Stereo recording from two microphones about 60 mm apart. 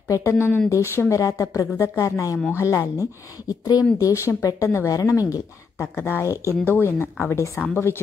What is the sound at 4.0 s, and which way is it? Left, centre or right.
Speech, left.